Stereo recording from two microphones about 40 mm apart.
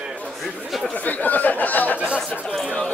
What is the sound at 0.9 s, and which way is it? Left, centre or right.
Chatter, left.